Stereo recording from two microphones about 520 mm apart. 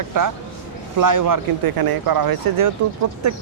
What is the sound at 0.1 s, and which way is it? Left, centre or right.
Speech, right.